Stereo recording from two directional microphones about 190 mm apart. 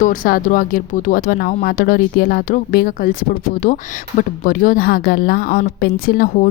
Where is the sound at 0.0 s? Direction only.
45° left (ahead or behind).